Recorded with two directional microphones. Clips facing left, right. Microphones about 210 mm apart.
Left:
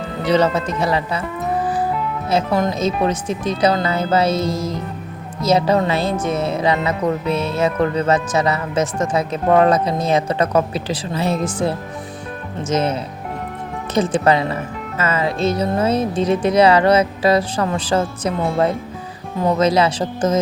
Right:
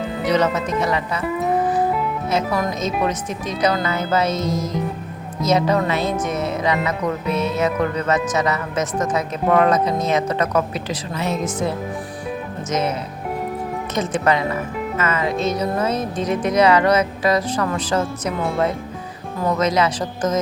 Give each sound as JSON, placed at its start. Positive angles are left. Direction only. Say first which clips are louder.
{"t": 0.3, "sound": "speech", "louder": "left 3 dB", "side_deg": 30}
{"t": 2.3, "sound": "speech", "louder": "left 4 dB", "side_deg": 25}
{"t": 19.4, "sound": "speech", "louder": "left 3 dB", "side_deg": 30}